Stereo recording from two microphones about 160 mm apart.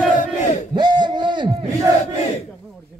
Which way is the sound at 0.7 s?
25° right (ahead or behind).